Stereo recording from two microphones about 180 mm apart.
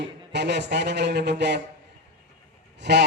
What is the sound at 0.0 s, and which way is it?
A man's voice, 70° right (ahead or behind).